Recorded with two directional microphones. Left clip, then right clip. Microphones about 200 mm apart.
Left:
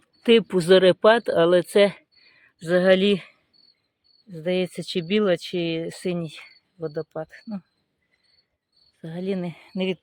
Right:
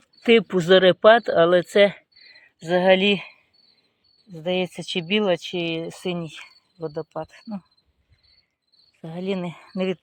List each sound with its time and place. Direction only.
0.3 s speech: 10° left (ahead or behind)
4.3 s speech: 15° left (ahead or behind)
9.0 s speech: 10° left (ahead or behind)